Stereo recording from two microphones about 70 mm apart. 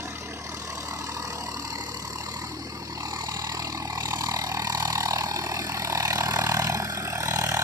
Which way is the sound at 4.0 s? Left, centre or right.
Right.